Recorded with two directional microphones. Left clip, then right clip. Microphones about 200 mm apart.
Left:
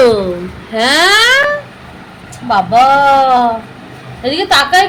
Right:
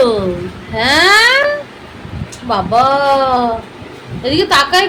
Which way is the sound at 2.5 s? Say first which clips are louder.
Left 3 dB; 5° right (ahead or behind).